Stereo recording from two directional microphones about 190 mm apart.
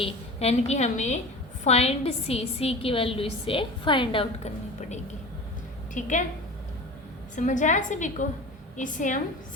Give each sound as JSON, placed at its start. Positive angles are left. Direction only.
{"t": 0.0, "sound": "a woman's voice", "side_deg": 35}
{"t": 7.3, "sound": "a woman's voice", "side_deg": 40}